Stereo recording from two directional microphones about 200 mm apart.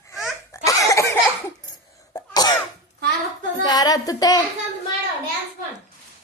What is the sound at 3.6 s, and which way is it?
Child singing, 20° left (ahead or behind).